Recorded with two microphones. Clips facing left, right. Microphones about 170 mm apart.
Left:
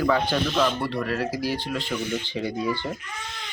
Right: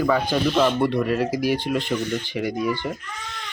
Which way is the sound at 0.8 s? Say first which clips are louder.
Right 6 dB; 20° right (ahead or behind).